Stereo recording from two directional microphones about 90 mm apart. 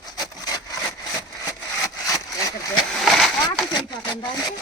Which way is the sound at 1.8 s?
40° left (ahead or behind).